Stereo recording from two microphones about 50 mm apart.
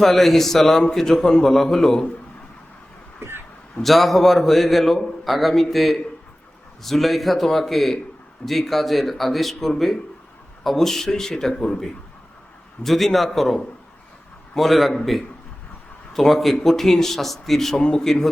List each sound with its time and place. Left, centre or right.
0.0 s a man's voice: centre
3.2 s a sound: right
3.8 s a man's voice: centre